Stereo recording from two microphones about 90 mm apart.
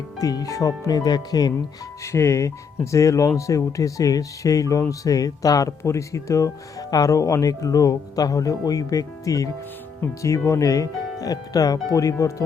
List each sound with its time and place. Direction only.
0.2 s speech: 45° left (ahead or behind)
2.1 s speech: 35° left (ahead or behind)